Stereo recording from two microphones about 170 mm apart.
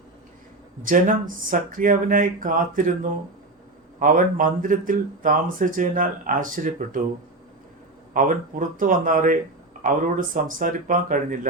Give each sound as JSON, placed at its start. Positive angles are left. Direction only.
{"t": 0.9, "sound": "speech", "side_deg": -50}
{"t": 8.1, "sound": "speech", "side_deg": -55}